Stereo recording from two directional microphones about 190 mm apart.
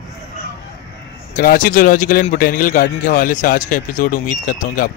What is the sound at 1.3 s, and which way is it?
A man's voice, 45° left (ahead or behind).